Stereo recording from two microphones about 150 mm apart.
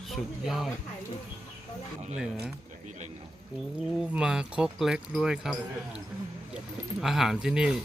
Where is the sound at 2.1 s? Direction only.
5° right (ahead or behind).